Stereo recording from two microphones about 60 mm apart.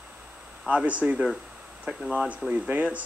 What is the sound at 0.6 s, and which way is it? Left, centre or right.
Speech, right.